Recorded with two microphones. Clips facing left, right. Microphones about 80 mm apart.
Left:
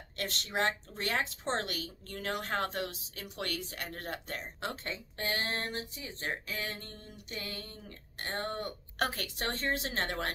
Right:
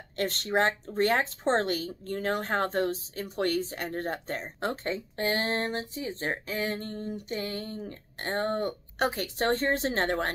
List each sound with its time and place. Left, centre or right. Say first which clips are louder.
0.2 s speech: right 7 dB; right
8.9 s a woman's voice: right 4 dB; right
9.4 s speech: right 8 dB; right